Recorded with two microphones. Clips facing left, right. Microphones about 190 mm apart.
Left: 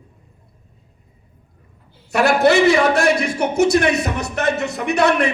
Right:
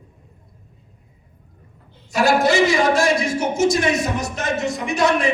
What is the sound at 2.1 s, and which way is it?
A man's voice, 65° left (ahead or behind).